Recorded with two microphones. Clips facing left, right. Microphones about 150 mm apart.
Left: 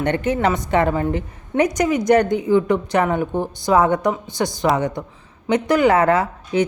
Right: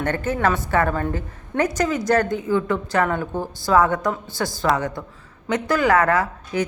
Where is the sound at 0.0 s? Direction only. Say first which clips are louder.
Left 3 dB; 20° left (ahead or behind).